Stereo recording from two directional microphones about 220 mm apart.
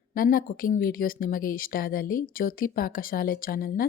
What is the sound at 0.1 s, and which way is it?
A woman's voice, 40° left (ahead or behind).